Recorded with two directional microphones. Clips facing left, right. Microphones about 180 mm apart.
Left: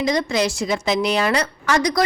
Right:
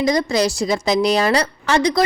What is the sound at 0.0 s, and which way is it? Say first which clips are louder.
A woman's voice: right 3 dB; 35° right (ahead or behind).